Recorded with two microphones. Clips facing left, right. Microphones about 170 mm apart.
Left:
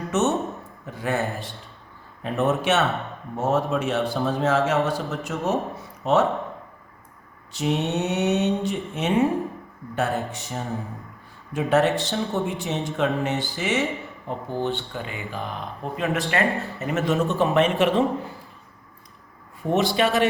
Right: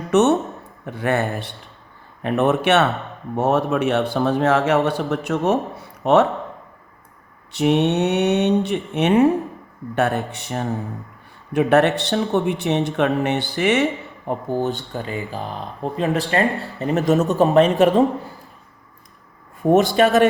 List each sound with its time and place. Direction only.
0.1 s speech: 65° right (ahead or behind)
7.5 s speech: 65° right (ahead or behind)
14.3 s speech: 45° right (ahead or behind)
19.6 s a man's voice: 50° right (ahead or behind)